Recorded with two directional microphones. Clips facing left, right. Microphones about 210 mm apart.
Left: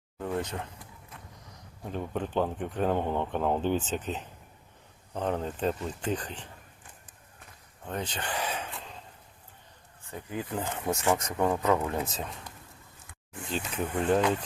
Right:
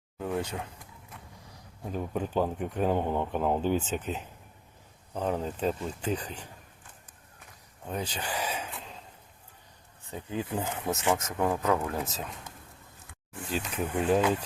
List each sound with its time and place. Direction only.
0.2 s speech: 5° right (ahead or behind)
1.9 s speech: 5° right (ahead or behind)
7.9 s a sound: 10° right (ahead or behind)
10.1 s speech: 20° right (ahead or behind)
10.5 s speech: 5° right (ahead or behind)
13.9 s speech: 5° right (ahead or behind)